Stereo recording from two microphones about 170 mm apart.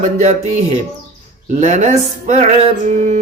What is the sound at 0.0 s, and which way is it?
Speech, 45° right (ahead or behind).